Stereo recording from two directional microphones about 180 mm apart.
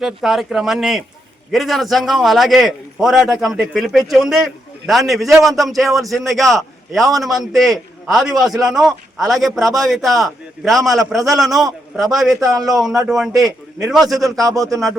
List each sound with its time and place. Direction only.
0.0 s a man's voice: centre (ahead or behind)
12.5 s a man's voice: 20° right (ahead or behind)
12.8 s a man's voice: centre (ahead or behind)
14.3 s a man's voice: 20° right (ahead or behind)